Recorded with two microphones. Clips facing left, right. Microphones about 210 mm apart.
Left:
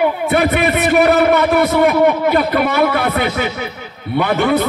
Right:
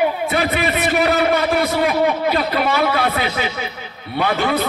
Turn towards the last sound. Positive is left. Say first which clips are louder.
# left 4 dB
turn(degrees=55)  # may be behind; listen again after turning